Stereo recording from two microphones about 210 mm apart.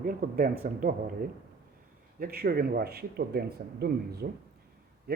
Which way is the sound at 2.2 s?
45° right (ahead or behind).